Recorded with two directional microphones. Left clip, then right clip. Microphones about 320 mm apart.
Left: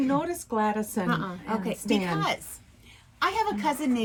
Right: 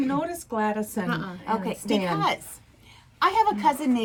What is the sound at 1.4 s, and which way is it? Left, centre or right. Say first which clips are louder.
A woman's voice: right 3 dB; centre.